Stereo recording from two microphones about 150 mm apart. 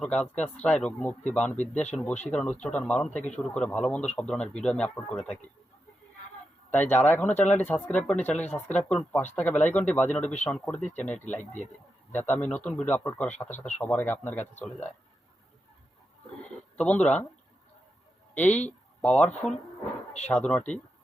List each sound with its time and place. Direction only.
0.0 s a man's voice: 5° left (ahead or behind)
7.0 s a man's voice: 10° left (ahead or behind)
16.4 s a sound: 10° left (ahead or behind)
18.3 s a man's voice: 10° left (ahead or behind)